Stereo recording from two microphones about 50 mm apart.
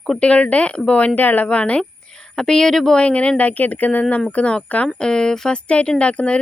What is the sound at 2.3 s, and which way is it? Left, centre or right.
Speech, centre.